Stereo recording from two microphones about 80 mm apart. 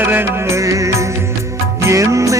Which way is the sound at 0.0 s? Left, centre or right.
Right.